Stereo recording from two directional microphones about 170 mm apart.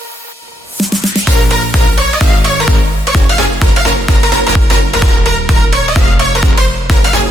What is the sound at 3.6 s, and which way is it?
Music, centre (ahead or behind).